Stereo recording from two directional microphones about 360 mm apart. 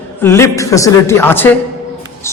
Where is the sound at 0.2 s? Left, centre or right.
Centre.